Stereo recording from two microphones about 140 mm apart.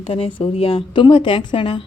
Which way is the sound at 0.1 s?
40° left (ahead or behind).